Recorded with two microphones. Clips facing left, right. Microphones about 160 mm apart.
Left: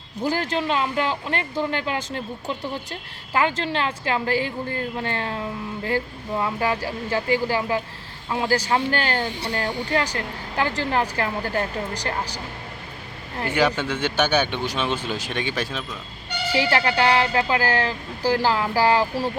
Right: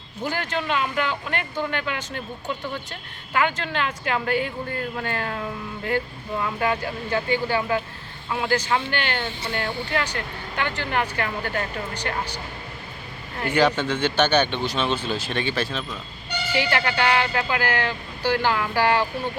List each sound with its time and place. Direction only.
0.2 s speech: 35° left (ahead or behind)
13.5 s speech: 10° left (ahead or behind)
16.5 s speech: 35° left (ahead or behind)